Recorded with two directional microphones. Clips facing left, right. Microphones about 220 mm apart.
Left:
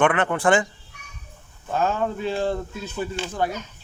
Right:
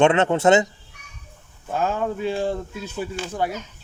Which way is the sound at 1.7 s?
10° right (ahead or behind).